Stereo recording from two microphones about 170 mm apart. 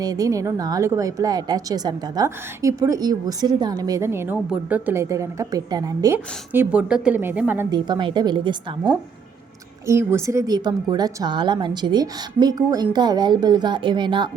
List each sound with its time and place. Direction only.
0.0 s a woman's voice: 20° right (ahead or behind)
7.7 s a woman's voice: 25° right (ahead or behind)
9.8 s a woman's voice: 15° right (ahead or behind)